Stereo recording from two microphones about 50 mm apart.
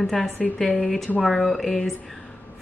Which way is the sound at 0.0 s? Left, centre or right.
Centre.